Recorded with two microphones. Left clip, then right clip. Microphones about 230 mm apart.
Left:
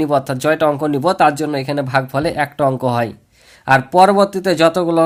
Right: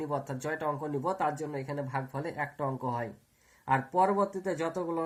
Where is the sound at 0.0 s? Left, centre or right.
Left.